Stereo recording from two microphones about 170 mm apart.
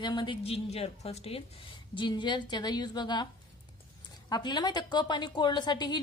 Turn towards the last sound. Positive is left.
turn(degrees=25)  # may be behind; listen again after turning